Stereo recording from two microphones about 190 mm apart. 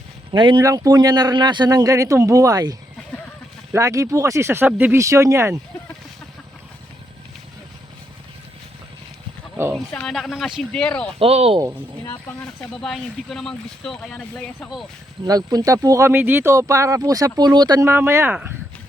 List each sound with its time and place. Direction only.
0.3 s speech: 25° right (ahead or behind)
9.7 s speech: 5° left (ahead or behind)
11.2 s speech: 30° right (ahead or behind)
12.8 s speech: centre (ahead or behind)
15.2 s speech: 20° right (ahead or behind)